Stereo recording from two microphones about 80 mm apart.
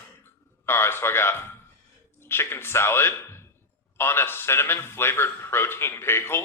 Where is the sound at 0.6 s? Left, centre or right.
Left.